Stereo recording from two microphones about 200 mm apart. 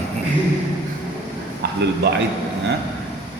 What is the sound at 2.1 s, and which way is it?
Speech, 60° right (ahead or behind).